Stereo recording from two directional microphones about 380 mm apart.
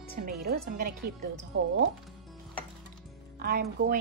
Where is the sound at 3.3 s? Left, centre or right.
Right.